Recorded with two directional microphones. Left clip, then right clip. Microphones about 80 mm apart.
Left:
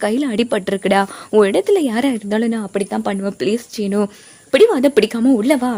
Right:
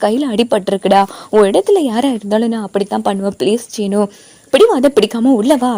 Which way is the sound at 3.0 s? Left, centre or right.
Right.